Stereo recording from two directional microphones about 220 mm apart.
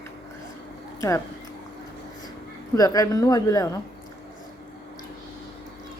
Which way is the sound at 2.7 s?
15° left (ahead or behind).